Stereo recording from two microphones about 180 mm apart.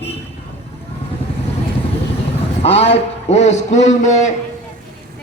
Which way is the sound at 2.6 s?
35° left (ahead or behind).